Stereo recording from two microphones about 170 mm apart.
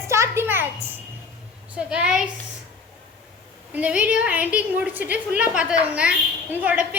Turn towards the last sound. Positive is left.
turn(degrees=-10)  # may be behind; listen again after turning